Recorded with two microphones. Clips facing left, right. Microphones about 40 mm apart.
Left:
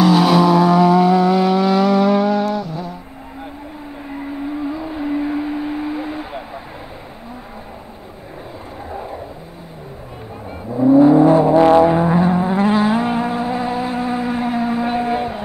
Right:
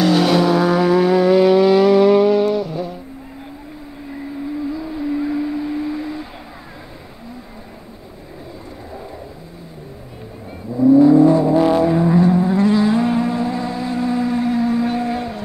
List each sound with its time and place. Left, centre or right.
0.0 s vehicle: centre
4.1 s a sound: left
8.9 s vehicle: left
10.7 s vehicle: left